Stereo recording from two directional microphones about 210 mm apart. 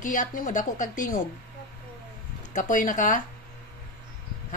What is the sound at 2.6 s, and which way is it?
Speech, 35° left (ahead or behind).